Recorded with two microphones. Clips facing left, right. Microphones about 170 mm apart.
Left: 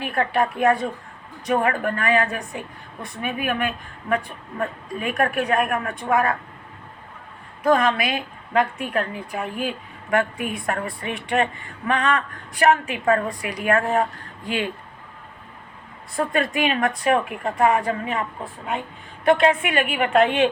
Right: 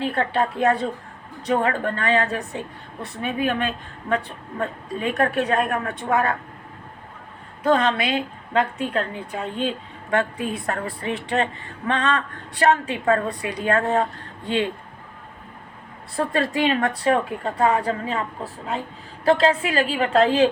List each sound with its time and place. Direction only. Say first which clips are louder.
0.0 s a woman's voice: even; 25° right (ahead or behind)
7.6 s a woman's voice: left 1 dB; 25° right (ahead or behind)
16.1 s a woman's voice: even; 30° right (ahead or behind)